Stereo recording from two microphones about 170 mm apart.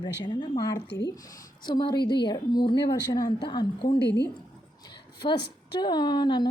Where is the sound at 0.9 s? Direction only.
90° left.